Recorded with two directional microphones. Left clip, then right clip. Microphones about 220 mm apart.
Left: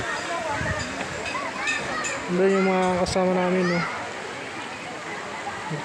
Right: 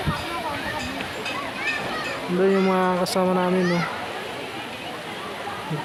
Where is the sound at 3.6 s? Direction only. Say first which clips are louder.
Right 1 dB; 35° right (ahead or behind).